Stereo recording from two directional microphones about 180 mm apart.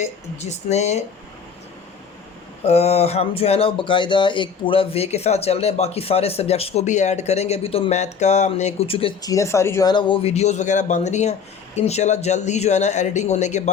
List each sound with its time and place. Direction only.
0.0 s speech: 40° left (ahead or behind)
2.6 s speech: 35° left (ahead or behind)
9.3 s speech: 15° left (ahead or behind); by 13.7 s 40° left (ahead or behind)